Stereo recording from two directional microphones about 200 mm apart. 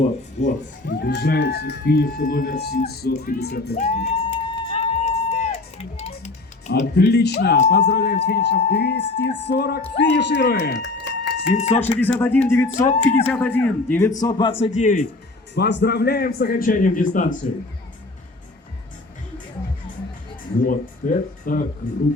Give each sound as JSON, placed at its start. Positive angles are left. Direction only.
{"t": 0.4, "sound": "a man's voice", "side_deg": 35}
{"t": 0.9, "sound": "speech", "side_deg": 55}
{"t": 3.8, "sound": "a sound", "side_deg": 30}
{"t": 6.9, "sound": "speech", "side_deg": 55}
{"t": 11.5, "sound": "a man's voice", "side_deg": 35}
{"t": 11.9, "sound": "a man's voice", "side_deg": 10}
{"t": 14.2, "sound": "a man's voice", "side_deg": 20}
{"t": 14.6, "sound": "a man's voice", "side_deg": 35}
{"t": 15.5, "sound": "speech", "side_deg": 60}
{"t": 20.7, "sound": "speech", "side_deg": 45}